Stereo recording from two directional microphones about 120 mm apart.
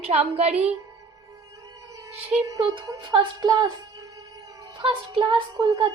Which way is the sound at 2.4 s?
30° right (ahead or behind).